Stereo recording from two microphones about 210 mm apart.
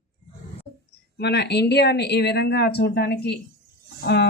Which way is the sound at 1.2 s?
55° left (ahead or behind).